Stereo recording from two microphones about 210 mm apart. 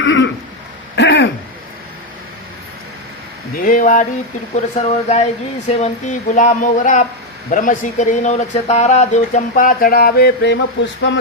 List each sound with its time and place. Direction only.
0.0 s throat clearing: 60° left (ahead or behind)
3.6 s speech: 40° left (ahead or behind); by 11.2 s 55° left (ahead or behind)